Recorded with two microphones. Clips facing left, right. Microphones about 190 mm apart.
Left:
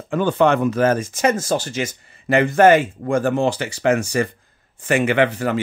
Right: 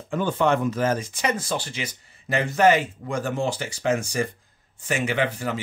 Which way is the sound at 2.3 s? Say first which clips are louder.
Left 6 dB; 60° left (ahead or behind).